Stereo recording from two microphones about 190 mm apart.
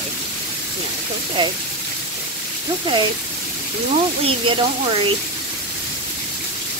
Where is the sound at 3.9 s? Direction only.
30° right (ahead or behind).